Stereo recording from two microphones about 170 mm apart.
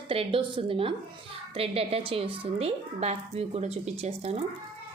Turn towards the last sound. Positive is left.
turn(degrees=-40)  # may be behind; listen again after turning